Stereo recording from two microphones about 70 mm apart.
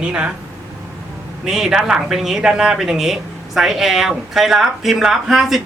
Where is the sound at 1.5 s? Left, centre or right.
Centre.